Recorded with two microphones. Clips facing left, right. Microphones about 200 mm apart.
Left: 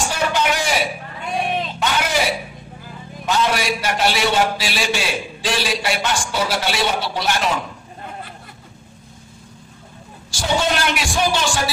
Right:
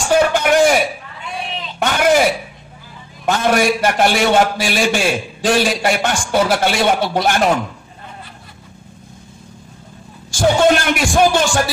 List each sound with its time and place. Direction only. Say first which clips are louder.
0.1 s a sound: right 12 dB; 50° right (ahead or behind)
3.3 s a man's voice: right 5 dB; 50° right (ahead or behind)
10.3 s a man's voice: right 8 dB; 50° right (ahead or behind)